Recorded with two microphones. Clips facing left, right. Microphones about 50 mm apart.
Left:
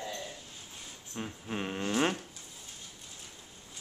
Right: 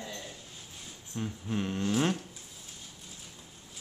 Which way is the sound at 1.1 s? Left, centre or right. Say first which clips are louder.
Right 3 dB; centre.